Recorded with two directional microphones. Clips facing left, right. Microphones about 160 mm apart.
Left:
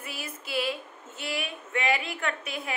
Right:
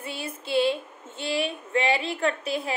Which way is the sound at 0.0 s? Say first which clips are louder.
Right 5 dB; 30° right (ahead or behind).